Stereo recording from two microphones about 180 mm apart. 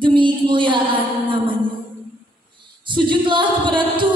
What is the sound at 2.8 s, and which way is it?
Singing, 25° right (ahead or behind).